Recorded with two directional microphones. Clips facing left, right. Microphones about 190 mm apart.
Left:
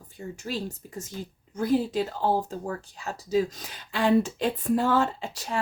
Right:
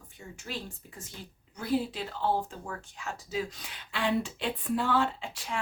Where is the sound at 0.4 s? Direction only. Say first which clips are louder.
Left 6 dB; 40° left (ahead or behind).